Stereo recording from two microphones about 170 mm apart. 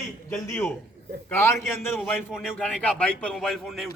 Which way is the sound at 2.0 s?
5° right (ahead or behind).